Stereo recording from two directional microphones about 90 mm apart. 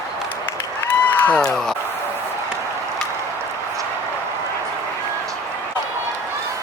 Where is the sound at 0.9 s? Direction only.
20° left (ahead or behind).